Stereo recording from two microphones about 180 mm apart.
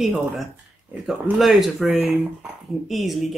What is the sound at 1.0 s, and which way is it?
Speech, centre (ahead or behind).